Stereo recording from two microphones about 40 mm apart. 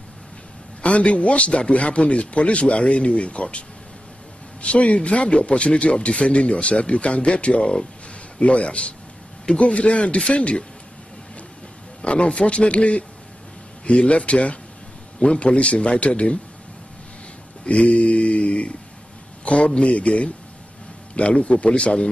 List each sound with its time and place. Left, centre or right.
0.8 s a man's voice: left
12.0 s a man's voice: left
17.6 s mantra: left
19.4 s a man's voice: left